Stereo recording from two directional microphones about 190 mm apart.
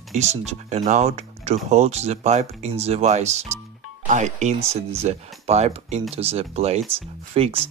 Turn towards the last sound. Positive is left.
turn(degrees=-30)  # may be behind; listen again after turning